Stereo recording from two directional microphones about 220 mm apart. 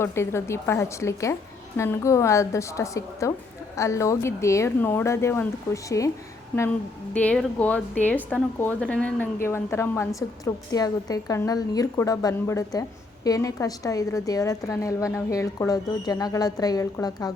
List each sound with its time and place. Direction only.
0.0 s a woman's voice: 10° left (ahead or behind)